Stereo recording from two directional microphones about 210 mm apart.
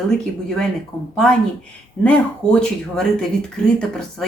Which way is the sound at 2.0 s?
5° left (ahead or behind).